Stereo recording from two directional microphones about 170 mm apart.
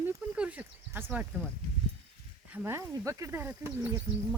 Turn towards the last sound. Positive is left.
turn(degrees=-10)  # may be behind; listen again after turning